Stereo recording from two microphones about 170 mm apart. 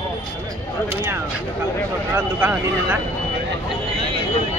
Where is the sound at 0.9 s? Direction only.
15° right (ahead or behind).